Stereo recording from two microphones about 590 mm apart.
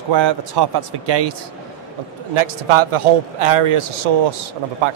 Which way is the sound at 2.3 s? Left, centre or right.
Right.